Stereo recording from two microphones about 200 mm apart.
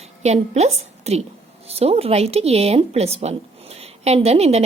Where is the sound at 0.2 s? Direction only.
35° right (ahead or behind).